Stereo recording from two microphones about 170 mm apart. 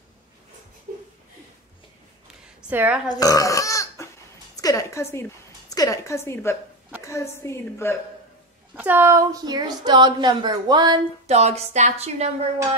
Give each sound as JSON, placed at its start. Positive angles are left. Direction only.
{"t": 2.7, "sound": "speech", "side_deg": -10}
{"t": 3.1, "sound": "a woman's voice", "side_deg": 20}
{"t": 8.7, "sound": "a woman's voice", "side_deg": -10}
{"t": 11.2, "sound": "a woman's voice", "side_deg": -40}